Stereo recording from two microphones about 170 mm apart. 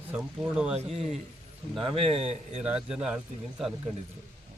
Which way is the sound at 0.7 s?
35° right (ahead or behind).